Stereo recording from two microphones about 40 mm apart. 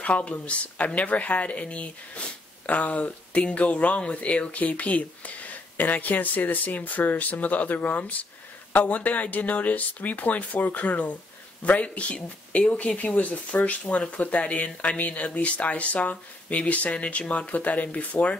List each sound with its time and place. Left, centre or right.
0.0 s speech: left